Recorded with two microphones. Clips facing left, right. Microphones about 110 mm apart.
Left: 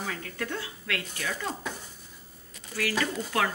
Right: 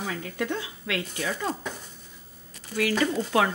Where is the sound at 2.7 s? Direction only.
20° right (ahead or behind).